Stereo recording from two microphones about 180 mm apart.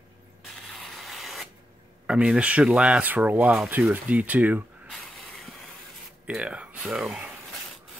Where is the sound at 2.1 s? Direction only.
5° right (ahead or behind).